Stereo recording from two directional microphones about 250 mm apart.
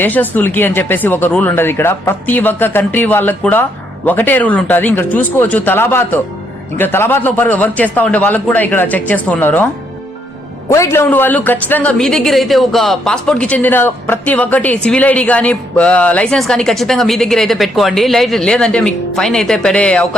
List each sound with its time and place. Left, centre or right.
0.0 s speech: centre
10.7 s speech: centre